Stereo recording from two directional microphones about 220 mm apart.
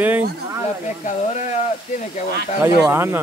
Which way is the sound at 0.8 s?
35° left (ahead or behind).